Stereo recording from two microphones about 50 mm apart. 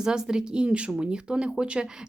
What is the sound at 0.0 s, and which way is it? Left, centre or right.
Speech, centre.